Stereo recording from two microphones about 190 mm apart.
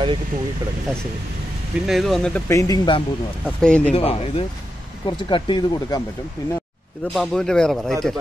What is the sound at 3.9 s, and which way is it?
Speech, 30° left (ahead or behind).